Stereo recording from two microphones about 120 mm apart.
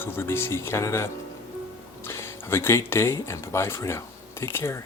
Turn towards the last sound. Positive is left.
turn(degrees=20)  # may be behind; listen again after turning